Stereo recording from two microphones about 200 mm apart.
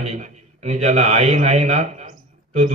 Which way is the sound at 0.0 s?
35° right (ahead or behind).